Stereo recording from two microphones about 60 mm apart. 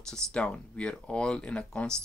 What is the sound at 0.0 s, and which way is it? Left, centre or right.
Speech, centre.